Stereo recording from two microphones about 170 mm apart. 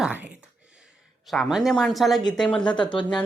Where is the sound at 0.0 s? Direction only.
10° right (ahead or behind).